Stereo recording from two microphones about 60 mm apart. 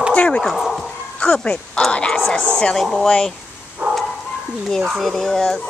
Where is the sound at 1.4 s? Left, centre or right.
Centre.